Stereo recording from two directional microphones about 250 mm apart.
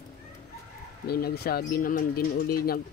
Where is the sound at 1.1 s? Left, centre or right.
Left.